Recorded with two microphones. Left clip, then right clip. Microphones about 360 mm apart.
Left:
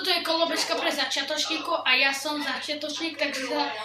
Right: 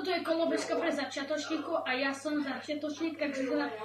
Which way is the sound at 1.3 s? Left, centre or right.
Left.